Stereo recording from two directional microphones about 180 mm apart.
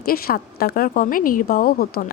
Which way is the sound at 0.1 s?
55° left (ahead or behind).